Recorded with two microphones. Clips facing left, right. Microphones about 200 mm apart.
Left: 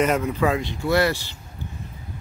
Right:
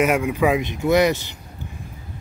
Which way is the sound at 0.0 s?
10° right (ahead or behind).